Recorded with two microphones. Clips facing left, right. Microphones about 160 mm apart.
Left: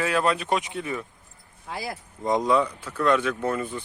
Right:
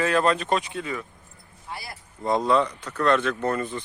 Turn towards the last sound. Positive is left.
turn(degrees=10)  # may be behind; listen again after turning